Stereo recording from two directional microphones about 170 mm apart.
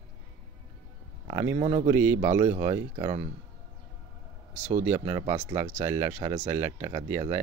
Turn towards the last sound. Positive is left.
turn(degrees=-40)  # may be behind; listen again after turning